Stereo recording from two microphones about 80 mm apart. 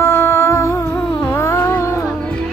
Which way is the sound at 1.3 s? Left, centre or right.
Left.